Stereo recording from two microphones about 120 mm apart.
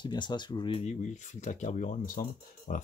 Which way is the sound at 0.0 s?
40° left (ahead or behind).